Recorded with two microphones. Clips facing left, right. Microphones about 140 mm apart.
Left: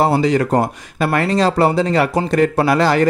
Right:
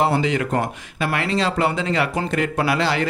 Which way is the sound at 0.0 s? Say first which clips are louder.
Left 5 dB; 40° left (ahead or behind).